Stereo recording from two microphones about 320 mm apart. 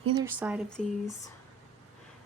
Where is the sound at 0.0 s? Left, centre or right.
Centre.